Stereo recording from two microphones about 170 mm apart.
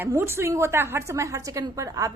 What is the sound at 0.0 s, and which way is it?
A woman's voice, 15° right (ahead or behind).